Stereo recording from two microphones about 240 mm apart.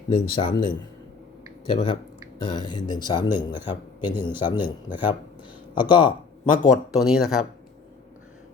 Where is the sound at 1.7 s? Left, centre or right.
Centre.